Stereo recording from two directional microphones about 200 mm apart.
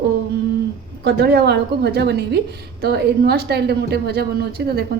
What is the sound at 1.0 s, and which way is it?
A woman's voice, 55° right (ahead or behind).